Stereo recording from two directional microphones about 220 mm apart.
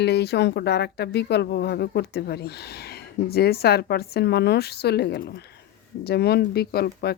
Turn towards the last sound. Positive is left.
turn(degrees=45)  # may be behind; listen again after turning